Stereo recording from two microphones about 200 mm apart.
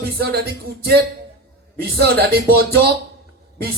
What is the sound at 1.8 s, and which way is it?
Speech, 50° right (ahead or behind).